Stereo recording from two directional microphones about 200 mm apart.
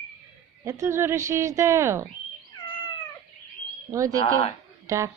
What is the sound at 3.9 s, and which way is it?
Speech, 15° right (ahead or behind).